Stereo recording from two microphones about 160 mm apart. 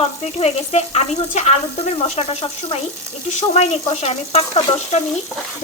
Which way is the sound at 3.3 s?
45° left (ahead or behind).